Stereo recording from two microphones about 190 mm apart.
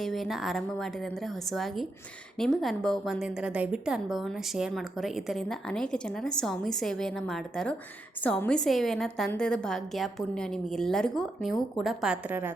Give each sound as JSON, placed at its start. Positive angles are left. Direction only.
{"t": 0.0, "sound": "a woman's voice", "side_deg": 0}